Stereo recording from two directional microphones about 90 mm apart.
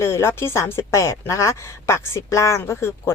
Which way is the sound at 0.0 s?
30° left (ahead or behind).